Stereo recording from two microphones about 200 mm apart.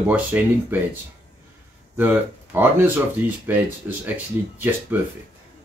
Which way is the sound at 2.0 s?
10° right (ahead or behind).